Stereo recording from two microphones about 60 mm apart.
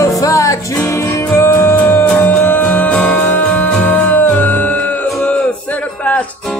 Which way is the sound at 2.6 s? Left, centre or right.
Left.